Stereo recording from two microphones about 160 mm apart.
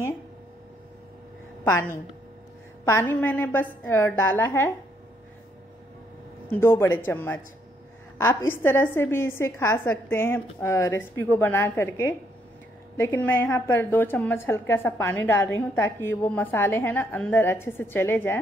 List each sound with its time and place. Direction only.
1.6 s a woman's voice: 15° left (ahead or behind)
6.5 s a woman's voice: 15° left (ahead or behind)